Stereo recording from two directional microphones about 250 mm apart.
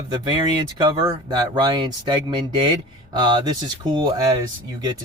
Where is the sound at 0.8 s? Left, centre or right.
Centre.